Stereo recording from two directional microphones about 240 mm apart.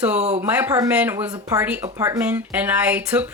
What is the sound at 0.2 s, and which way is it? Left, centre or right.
Speech, right.